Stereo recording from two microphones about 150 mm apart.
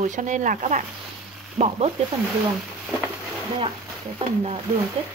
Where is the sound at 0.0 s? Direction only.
55° right (ahead or behind).